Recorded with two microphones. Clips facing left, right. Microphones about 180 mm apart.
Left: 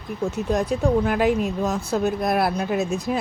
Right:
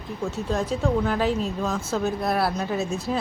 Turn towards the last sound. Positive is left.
turn(degrees=15)  # may be behind; listen again after turning